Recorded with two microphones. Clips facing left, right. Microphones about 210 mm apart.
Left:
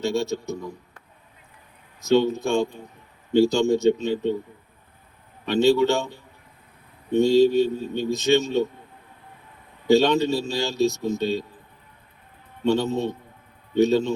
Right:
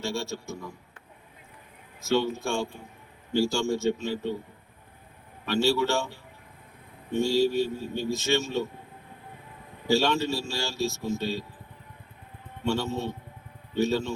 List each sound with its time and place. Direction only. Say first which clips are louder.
0.0 s a man's voice: left 8 dB; 20° left (ahead or behind)
2.0 s a man's voice: left 6 dB; 20° left (ahead or behind)
5.5 s a man's voice: left 6 dB; 20° left (ahead or behind)
9.8 s a man's voice: left 7 dB; 20° left (ahead or behind)
12.6 s a man's voice: left 6 dB; 20° left (ahead or behind)